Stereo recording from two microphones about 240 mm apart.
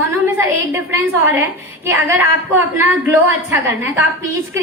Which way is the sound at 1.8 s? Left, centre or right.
Centre.